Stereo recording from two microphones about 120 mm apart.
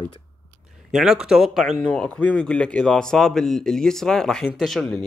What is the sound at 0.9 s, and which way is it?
Speech, 5° right (ahead or behind).